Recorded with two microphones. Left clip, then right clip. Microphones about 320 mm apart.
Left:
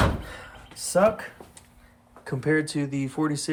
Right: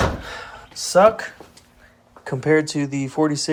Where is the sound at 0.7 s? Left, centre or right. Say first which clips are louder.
Right 7 dB; centre.